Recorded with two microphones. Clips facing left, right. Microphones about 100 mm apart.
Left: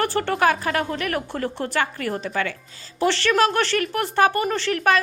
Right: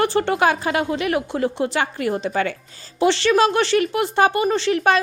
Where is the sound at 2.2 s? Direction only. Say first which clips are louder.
Right 4 dB; 30° right (ahead or behind).